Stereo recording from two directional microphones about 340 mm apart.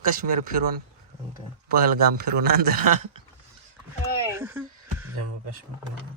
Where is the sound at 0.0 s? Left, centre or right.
Right.